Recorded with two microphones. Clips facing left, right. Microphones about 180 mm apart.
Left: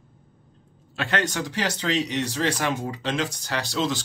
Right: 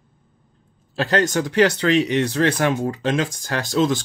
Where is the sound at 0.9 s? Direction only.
35° right (ahead or behind).